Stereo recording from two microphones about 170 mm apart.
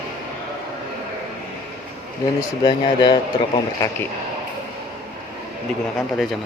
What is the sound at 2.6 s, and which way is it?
Speech, 25° left (ahead or behind).